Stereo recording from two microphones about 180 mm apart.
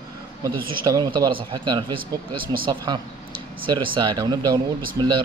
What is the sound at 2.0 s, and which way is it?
Speech, 50° right (ahead or behind).